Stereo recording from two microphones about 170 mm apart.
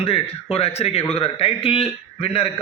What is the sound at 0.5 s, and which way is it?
A man's voice, 35° left (ahead or behind).